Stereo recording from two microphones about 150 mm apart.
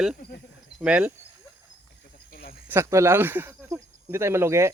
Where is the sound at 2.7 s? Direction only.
15° right (ahead or behind).